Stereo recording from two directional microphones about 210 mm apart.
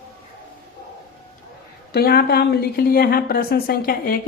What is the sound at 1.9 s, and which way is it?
A woman's voice, 50° left (ahead or behind).